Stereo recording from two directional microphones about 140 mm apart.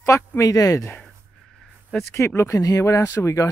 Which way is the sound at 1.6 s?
5° left (ahead or behind).